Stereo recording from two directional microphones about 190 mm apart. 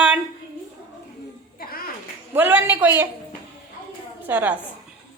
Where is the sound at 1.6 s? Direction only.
50° left (ahead or behind).